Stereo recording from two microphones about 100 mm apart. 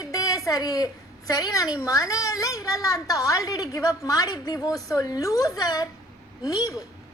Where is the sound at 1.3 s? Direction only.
35° left (ahead or behind).